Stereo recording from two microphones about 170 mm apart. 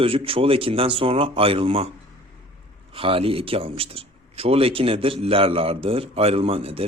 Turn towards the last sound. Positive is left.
turn(degrees=-35)  # may be behind; listen again after turning